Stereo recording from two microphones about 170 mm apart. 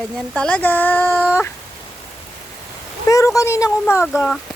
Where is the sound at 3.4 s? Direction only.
20° left (ahead or behind).